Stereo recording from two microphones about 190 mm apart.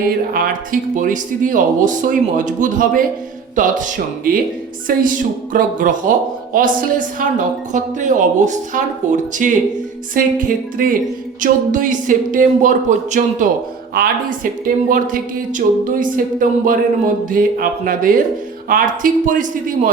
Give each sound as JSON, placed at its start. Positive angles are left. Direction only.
{"t": 0.3, "sound": "a woman's voice", "side_deg": -45}